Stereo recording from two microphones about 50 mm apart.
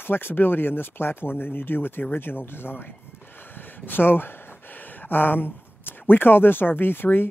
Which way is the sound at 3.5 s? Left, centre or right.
Left.